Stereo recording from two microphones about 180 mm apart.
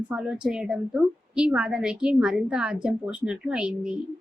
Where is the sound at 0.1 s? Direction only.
5° right (ahead or behind).